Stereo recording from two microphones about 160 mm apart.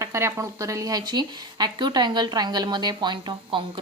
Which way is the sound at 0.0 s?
15° right (ahead or behind).